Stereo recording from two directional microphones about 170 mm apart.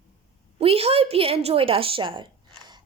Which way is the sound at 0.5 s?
35° right (ahead or behind).